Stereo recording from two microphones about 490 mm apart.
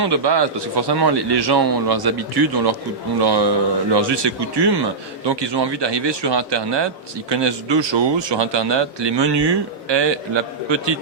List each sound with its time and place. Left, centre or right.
0.0 s a man's voice: right